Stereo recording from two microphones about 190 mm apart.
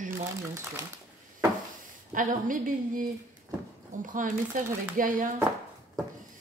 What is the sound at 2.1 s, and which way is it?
Speech, 45° right (ahead or behind).